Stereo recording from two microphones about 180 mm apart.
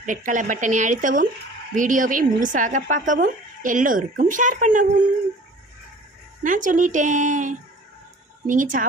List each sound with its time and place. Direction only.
0.0 s a woman's voice: 45° right (ahead or behind)
6.4 s a woman's voice: 45° right (ahead or behind)